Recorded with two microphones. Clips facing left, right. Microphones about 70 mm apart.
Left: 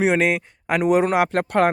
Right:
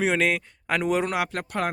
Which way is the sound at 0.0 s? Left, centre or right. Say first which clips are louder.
Left 4 dB; centre.